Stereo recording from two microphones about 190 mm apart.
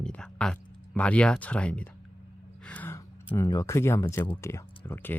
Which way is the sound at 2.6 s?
10° left (ahead or behind).